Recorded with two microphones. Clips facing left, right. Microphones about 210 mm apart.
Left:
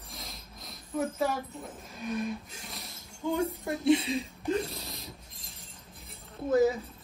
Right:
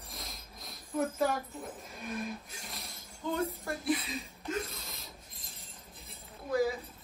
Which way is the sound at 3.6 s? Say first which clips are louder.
Left 8 dB; 25° left (ahead or behind).